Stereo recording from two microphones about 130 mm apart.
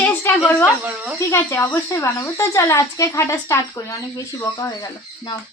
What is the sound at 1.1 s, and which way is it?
Speech, 20° left (ahead or behind).